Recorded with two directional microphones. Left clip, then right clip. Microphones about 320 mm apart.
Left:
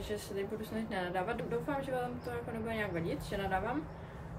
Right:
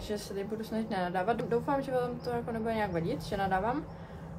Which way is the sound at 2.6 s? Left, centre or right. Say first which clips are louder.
Right 4 dB; centre.